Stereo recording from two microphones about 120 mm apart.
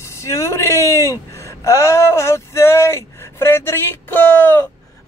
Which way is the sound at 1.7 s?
25° left (ahead or behind).